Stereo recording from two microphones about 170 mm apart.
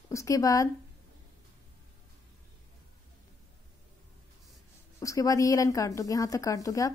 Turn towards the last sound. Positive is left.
turn(degrees=20)  # may be behind; listen again after turning